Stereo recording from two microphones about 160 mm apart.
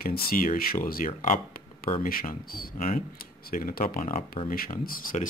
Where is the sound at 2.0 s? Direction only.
65° left (ahead or behind); by 4.3 s 50° left (ahead or behind).